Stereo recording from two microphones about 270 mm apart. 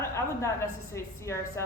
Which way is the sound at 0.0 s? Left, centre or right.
Centre.